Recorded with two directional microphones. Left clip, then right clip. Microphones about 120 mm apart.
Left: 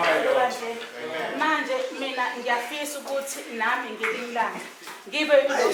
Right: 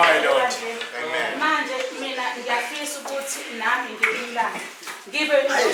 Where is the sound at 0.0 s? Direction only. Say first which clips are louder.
Right 4 dB; 25° left (ahead or behind).